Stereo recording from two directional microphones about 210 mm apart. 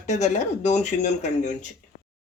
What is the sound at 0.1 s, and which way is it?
Speech, 35° left (ahead or behind).